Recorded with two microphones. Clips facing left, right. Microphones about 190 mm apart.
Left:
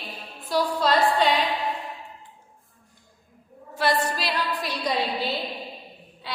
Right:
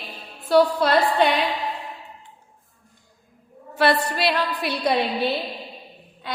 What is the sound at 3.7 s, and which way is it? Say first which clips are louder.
A woman's voice: right 4 dB; 65° right (ahead or behind).